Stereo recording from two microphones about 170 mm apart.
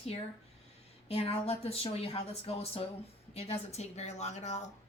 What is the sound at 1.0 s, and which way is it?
A woman's voice, 35° left (ahead or behind).